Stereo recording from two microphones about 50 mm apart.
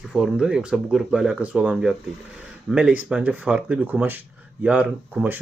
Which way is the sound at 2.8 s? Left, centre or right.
Right.